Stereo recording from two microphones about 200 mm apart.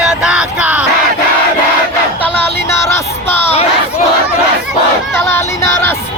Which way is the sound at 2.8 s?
10° left (ahead or behind).